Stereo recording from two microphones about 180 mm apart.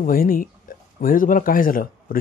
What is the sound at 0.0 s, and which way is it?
Speech, 50° left (ahead or behind).